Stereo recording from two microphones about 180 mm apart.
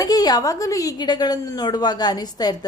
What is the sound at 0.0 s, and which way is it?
A woman's voice, 20° left (ahead or behind).